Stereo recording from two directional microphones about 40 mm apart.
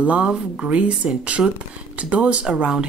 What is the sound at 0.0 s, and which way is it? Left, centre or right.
A woman's voice, right.